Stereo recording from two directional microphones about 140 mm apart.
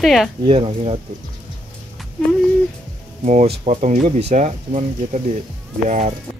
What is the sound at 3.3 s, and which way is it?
Speech, 50° right (ahead or behind).